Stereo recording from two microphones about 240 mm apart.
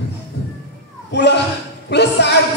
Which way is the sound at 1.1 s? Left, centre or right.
Left.